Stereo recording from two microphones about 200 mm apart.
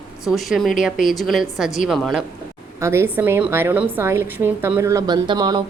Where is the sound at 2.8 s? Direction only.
10° right (ahead or behind).